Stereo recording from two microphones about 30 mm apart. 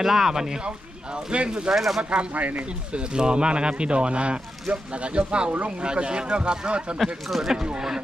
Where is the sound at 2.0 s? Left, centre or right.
Right.